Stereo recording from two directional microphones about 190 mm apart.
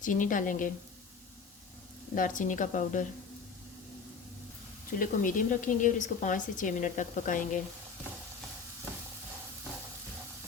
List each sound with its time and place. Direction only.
0.0 s a woman's voice: 45° left (ahead or behind)
2.1 s a woman's voice: 45° left (ahead or behind)
4.9 s a woman's voice: 45° left (ahead or behind)